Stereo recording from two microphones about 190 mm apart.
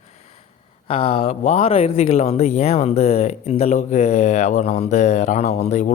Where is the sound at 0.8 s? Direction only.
30° left (ahead or behind).